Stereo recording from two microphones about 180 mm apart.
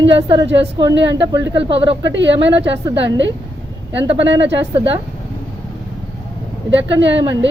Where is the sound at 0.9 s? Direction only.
85° right.